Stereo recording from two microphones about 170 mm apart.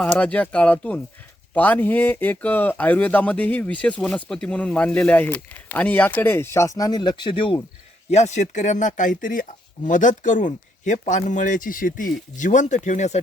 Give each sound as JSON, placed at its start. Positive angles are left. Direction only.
{"t": 0.0, "sound": "speech", "side_deg": 10}
{"t": 8.1, "sound": "speech", "side_deg": 40}